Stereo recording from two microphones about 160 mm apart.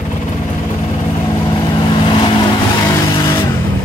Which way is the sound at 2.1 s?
30° left (ahead or behind).